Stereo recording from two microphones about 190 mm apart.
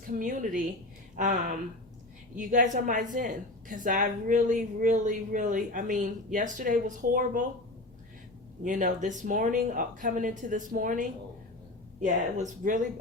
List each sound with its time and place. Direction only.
0.1 s a woman's voice: 45° right (ahead or behind)
8.6 s a woman's voice: 45° right (ahead or behind)